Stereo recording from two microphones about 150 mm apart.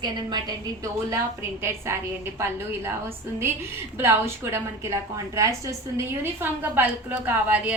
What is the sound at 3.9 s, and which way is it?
A woman's voice, 15° right (ahead or behind).